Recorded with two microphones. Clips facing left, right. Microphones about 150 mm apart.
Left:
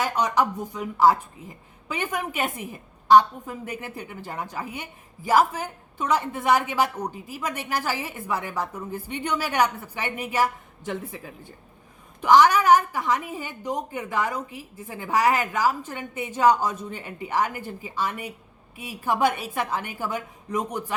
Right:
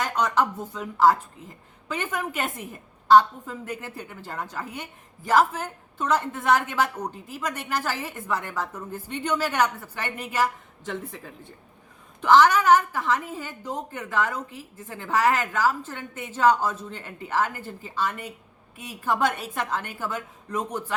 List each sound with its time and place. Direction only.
0.0 s speech: 10° left (ahead or behind)
12.2 s speech: 10° left (ahead or behind)